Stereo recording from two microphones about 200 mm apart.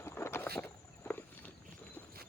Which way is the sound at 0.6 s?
10° left (ahead or behind).